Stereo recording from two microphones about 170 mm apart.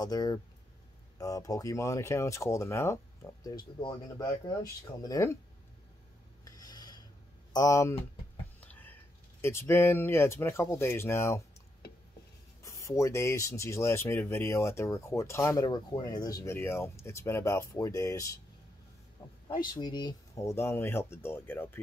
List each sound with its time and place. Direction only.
0.0 s speech: 25° left (ahead or behind)
6.4 s filing: 20° left (ahead or behind)
7.5 s speech: 20° left (ahead or behind)
12.6 s speech: 20° left (ahead or behind)
19.4 s speech: 25° left (ahead or behind)